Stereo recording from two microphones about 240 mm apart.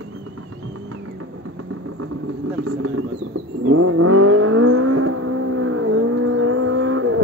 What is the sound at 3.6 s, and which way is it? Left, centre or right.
Vehicle, right.